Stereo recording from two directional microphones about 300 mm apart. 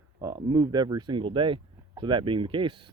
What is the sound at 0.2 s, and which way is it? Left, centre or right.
Speech, centre.